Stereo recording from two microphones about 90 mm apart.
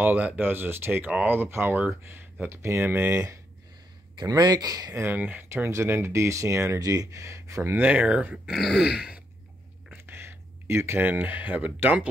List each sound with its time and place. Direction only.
0.0 s speech: 20° right (ahead or behind)
4.2 s speech: 50° right (ahead or behind)
5.1 s speech: 20° right (ahead or behind)
7.8 s speech: 20° right (ahead or behind)
8.5 s throat clearing: centre (ahead or behind)
10.0 s speech: 30° right (ahead or behind)